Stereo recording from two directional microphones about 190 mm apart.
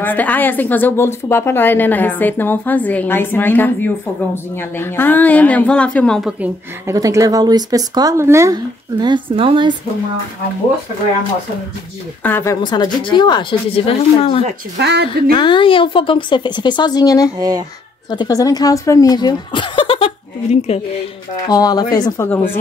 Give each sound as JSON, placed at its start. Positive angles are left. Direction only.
{"t": 0.0, "sound": "a woman's voice", "side_deg": 10}
{"t": 6.4, "sound": "speech", "side_deg": -15}
{"t": 12.2, "sound": "a woman's voice", "side_deg": 10}
{"t": 12.6, "sound": "speech", "side_deg": 20}
{"t": 14.8, "sound": "a woman's voice", "side_deg": -65}
{"t": 15.3, "sound": "speech", "side_deg": 25}
{"t": 17.4, "sound": "speech", "side_deg": -20}
{"t": 18.1, "sound": "speech", "side_deg": 20}
{"t": 21.5, "sound": "speech", "side_deg": 20}